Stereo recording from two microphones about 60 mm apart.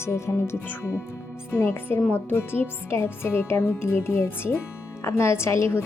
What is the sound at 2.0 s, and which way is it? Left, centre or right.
A woman's voice, left.